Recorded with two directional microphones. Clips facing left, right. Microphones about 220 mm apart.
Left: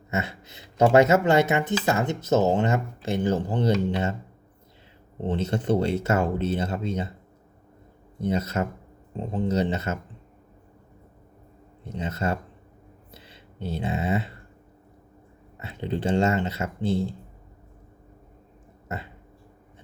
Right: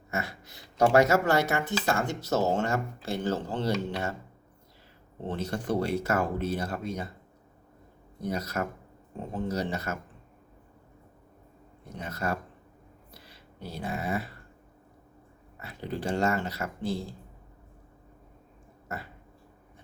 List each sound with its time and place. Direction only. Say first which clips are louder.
0.1 s speech: left 5 dB; 25° left (ahead or behind)
5.1 s speech: left 6 dB; 20° left (ahead or behind)
8.2 s speech: left 5 dB; 25° left (ahead or behind)
11.9 s speech: left 4 dB; 25° left (ahead or behind)
13.1 s a sound: left 3 dB; 25° left (ahead or behind)
15.5 s speech: left 5 dB; 25° left (ahead or behind)